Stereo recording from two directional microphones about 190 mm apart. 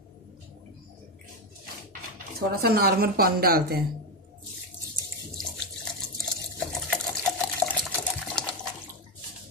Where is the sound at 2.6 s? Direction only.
50° right (ahead or behind).